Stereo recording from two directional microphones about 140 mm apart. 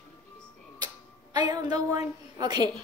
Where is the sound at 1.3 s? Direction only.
30° right (ahead or behind).